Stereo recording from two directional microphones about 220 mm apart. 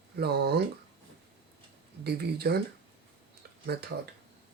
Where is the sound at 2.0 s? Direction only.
45° right (ahead or behind).